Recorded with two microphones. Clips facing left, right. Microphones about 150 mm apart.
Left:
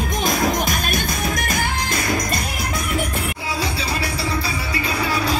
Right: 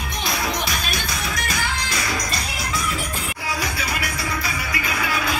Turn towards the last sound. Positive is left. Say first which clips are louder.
# left 3 dB
turn(degrees=35)  # may be behind; listen again after turning